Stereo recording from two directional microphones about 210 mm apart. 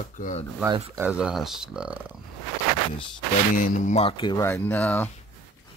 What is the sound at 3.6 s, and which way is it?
Speech, 35° left (ahead or behind).